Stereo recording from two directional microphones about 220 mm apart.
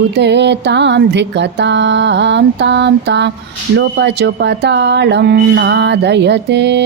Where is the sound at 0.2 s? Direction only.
50° right (ahead or behind).